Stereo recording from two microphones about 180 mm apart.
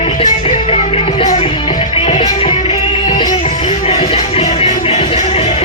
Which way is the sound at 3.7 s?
35° left (ahead or behind).